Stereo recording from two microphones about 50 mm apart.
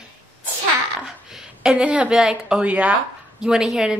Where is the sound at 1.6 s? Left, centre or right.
Right.